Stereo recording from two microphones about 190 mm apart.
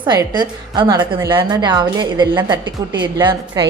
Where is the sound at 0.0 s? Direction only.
25° right (ahead or behind).